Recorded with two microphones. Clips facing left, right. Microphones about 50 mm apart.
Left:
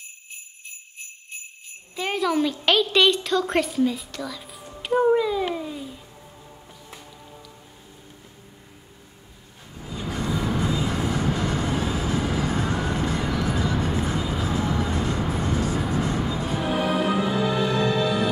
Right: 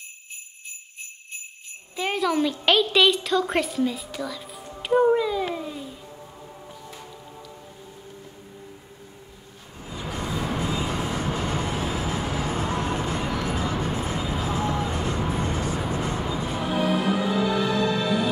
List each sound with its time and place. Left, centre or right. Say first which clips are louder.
2.0 s a woman's voice: even; centre
5.5 s babbling: left 1 dB; centre
10.2 s vehicle: left 3 dB; centre
10.5 s vehicle: left 2 dB; right
12.4 s music: left 1 dB; right
15.3 s vehicle: left 2 dB; right
16.2 s music: left 1 dB; right
16.6 s music: even; centre
17.0 s music: left 1 dB; centre
17.7 s music: left 1 dB; left